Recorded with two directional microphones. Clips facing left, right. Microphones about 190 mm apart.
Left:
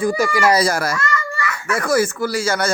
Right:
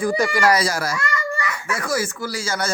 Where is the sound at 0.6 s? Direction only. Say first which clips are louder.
Left 4 dB; 55° left (ahead or behind).